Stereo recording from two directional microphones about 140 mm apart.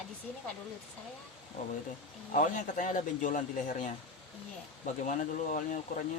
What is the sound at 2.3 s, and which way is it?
Speech, 65° left (ahead or behind).